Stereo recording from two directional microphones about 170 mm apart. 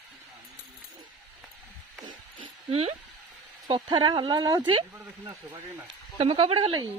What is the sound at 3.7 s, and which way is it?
Speech, 25° right (ahead or behind).